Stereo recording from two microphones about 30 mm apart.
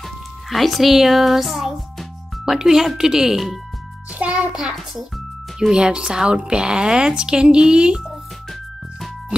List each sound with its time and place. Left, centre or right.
0.0 s speech: centre
4.1 s a child's voice: right
5.7 s speech: right